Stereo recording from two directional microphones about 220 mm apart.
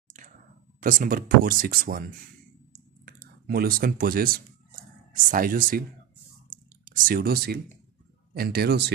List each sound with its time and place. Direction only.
0.7 s speech: 40° right (ahead or behind)
3.1 s speech: 45° right (ahead or behind)